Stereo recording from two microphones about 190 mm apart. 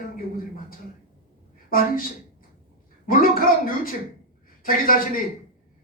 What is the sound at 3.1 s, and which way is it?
Speech, 50° left (ahead or behind).